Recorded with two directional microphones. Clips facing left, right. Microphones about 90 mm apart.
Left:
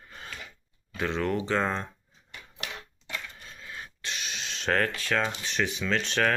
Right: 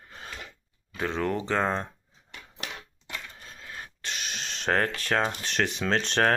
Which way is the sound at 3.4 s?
45° right (ahead or behind).